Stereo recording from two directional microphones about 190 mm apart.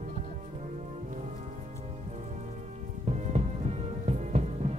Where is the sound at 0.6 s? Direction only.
35° right (ahead or behind).